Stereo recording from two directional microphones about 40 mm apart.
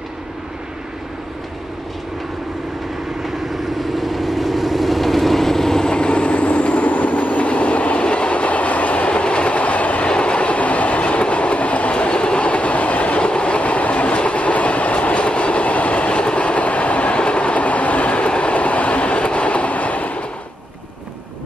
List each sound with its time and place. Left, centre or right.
3.8 s vehicle: centre; by 10.0 s left
10.0 s train: left